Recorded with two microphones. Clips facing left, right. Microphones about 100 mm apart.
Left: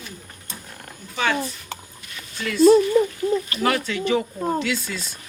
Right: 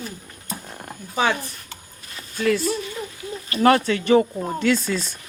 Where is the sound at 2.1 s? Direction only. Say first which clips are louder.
Right 8 dB; 45° right (ahead or behind).